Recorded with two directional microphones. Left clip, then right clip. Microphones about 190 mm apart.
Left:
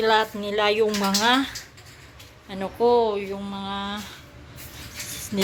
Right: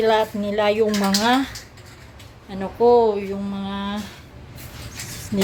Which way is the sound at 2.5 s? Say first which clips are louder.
Right 4 dB; centre (ahead or behind).